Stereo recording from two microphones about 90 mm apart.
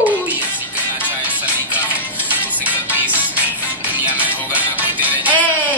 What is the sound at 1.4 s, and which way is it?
Music, 20° right (ahead or behind).